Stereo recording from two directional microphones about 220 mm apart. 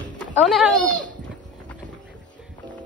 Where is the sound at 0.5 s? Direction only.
Centre (ahead or behind).